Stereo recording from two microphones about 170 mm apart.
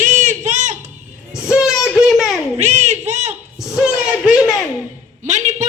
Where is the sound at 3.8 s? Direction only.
5° right (ahead or behind).